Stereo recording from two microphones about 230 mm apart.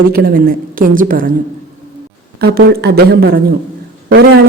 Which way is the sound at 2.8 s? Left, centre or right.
Right.